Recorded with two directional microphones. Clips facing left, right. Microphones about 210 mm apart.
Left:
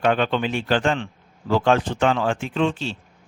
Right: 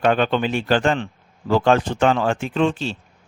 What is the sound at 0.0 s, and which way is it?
A man's voice, 45° right (ahead or behind).